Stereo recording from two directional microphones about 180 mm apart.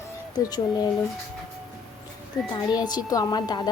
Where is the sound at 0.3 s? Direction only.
20° left (ahead or behind).